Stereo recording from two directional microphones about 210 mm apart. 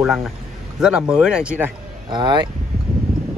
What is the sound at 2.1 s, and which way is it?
Speech, 20° right (ahead or behind).